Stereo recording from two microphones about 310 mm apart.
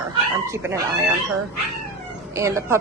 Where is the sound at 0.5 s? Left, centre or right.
Centre.